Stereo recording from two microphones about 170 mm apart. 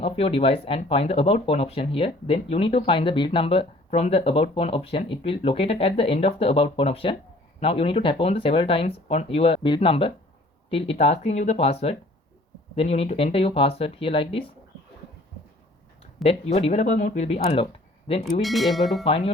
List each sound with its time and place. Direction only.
0.0 s speech: 35° left (ahead or behind)
16.2 s speech: 35° left (ahead or behind); by 17.2 s 50° left (ahead or behind)
17.2 s speech: 35° left (ahead or behind)
18.4 s speech: centre (ahead or behind)
19.0 s speech: 35° left (ahead or behind)